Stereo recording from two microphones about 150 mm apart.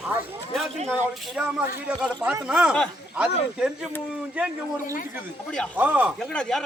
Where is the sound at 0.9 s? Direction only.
10° right (ahead or behind).